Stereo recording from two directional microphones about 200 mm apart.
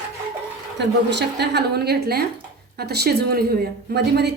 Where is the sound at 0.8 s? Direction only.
55° right (ahead or behind).